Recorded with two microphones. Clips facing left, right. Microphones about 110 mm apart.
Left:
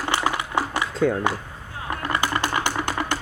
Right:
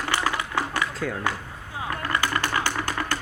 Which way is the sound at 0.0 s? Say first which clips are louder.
Left 2 dB; 20° left (ahead or behind).